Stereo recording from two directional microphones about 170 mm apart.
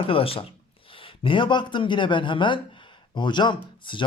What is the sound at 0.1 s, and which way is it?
Speech, 35° left (ahead or behind).